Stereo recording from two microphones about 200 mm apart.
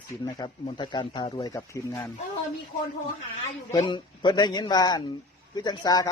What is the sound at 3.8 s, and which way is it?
A man's voice, 25° left (ahead or behind).